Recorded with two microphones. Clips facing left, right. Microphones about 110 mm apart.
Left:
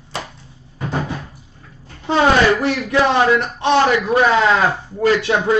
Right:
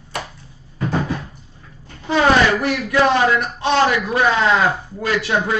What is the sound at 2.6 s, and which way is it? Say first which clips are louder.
Speech: even; 25° left (ahead or behind).